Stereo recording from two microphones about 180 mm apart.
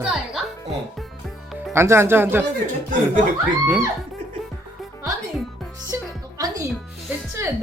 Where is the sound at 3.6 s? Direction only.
10° right (ahead or behind).